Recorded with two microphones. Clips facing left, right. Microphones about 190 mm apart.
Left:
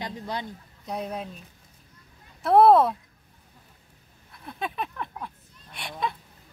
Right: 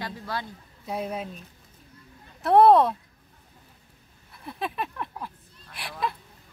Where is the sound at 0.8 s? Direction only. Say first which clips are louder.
Right 1 dB; 5° right (ahead or behind).